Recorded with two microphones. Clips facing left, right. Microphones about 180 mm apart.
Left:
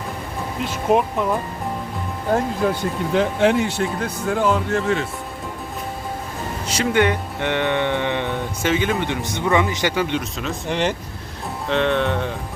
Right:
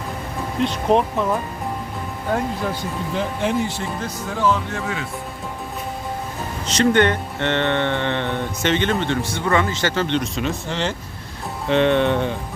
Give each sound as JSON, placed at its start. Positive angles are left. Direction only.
{"t": 0.6, "sound": "speech", "side_deg": 5}
{"t": 3.2, "sound": "speech", "side_deg": 75}
{"t": 6.7, "sound": "speech", "side_deg": 10}
{"t": 10.7, "sound": "speech", "side_deg": 15}
{"t": 11.7, "sound": "speech", "side_deg": 0}